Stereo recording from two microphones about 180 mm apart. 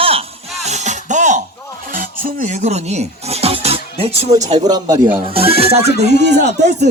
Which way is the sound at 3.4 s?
35° right (ahead or behind).